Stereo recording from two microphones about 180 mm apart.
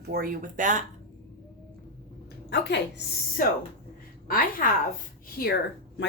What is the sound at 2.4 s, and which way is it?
Speech, 75° left (ahead or behind).